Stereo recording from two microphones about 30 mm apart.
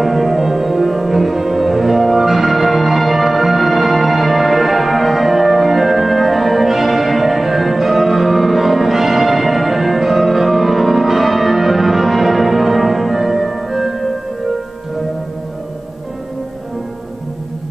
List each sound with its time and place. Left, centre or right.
0.0 s music: centre